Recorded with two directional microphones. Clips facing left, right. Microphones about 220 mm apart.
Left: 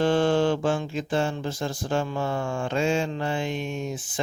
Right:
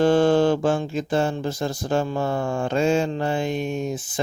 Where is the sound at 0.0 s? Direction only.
40° right (ahead or behind).